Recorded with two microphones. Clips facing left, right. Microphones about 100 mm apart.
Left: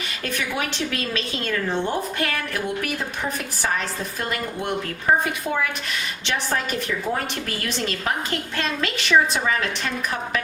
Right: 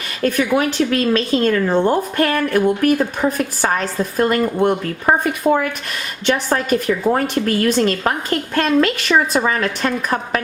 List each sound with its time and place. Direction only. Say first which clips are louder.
0.2 s a woman's voice: right 11 dB; 45° right (ahead or behind)